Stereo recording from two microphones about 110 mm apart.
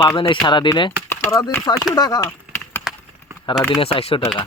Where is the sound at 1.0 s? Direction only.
30° left (ahead or behind).